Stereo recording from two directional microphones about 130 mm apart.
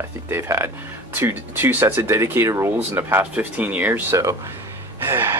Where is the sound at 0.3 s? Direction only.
20° right (ahead or behind).